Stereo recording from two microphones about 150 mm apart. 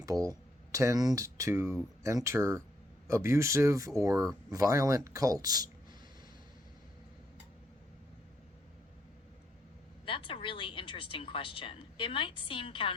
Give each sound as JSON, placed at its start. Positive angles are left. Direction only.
{"t": 0.0, "sound": "speech", "side_deg": -25}
{"t": 10.1, "sound": "speech", "side_deg": 35}